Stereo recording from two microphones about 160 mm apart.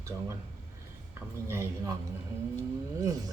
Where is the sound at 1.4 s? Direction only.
15° right (ahead or behind).